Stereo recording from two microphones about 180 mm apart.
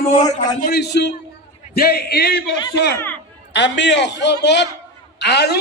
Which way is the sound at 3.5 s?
80° left.